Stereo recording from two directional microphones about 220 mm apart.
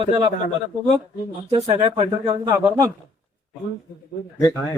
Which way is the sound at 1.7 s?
20° right (ahead or behind).